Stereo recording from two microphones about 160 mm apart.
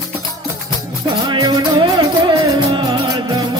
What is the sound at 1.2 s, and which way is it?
Music, 25° right (ahead or behind).